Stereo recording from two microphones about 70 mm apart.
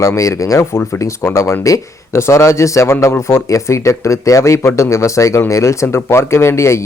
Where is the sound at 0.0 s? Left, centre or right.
Left.